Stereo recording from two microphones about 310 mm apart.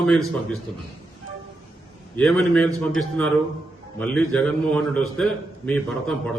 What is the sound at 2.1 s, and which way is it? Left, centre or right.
Speech, centre.